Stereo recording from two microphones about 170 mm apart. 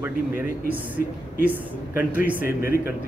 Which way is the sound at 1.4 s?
10° right (ahead or behind).